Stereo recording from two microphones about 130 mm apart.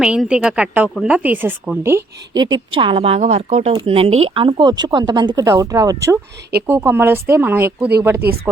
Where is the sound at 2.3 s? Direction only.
35° right (ahead or behind).